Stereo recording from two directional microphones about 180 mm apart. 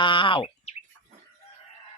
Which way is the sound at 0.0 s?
25° left (ahead or behind).